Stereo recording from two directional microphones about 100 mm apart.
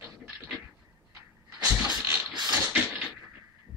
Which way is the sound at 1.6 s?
10° right (ahead or behind).